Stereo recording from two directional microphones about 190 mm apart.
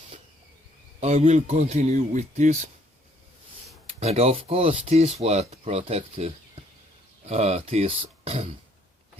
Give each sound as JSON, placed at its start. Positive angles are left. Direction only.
{"t": 0.9, "sound": "speech", "side_deg": -40}
{"t": 4.0, "sound": "speech", "side_deg": -35}